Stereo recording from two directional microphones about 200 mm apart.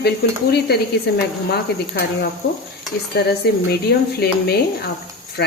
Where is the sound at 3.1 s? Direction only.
55° left (ahead or behind).